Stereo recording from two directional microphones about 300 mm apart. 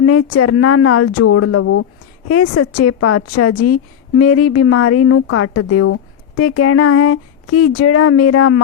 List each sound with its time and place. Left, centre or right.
0.0 s a woman's voice: left